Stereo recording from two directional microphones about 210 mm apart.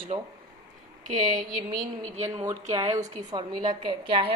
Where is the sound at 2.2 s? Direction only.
15° right (ahead or behind).